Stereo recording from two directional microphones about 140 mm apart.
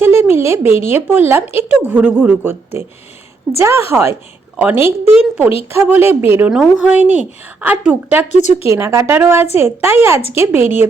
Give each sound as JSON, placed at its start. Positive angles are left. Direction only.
{"t": 0.0, "sound": "a woman's voice", "side_deg": -15}
{"t": 6.5, "sound": "a woman's voice", "side_deg": -5}
{"t": 8.3, "sound": "speech", "side_deg": 55}
{"t": 8.6, "sound": "a woman's voice", "side_deg": -20}